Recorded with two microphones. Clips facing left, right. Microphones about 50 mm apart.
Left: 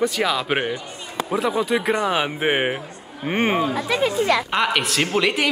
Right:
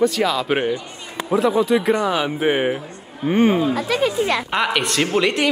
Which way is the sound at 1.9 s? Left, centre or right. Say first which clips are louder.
Right 1 dB; left.